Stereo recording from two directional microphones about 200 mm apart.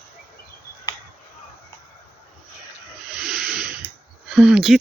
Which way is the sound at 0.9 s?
20° left (ahead or behind).